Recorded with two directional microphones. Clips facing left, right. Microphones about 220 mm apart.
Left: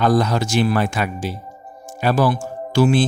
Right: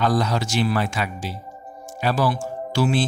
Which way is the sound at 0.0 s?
50° left (ahead or behind).